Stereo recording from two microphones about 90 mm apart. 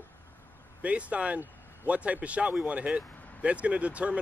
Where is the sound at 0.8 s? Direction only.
15° right (ahead or behind).